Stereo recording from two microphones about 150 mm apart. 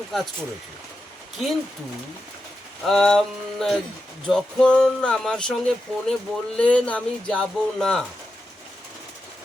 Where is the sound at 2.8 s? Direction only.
5° left (ahead or behind).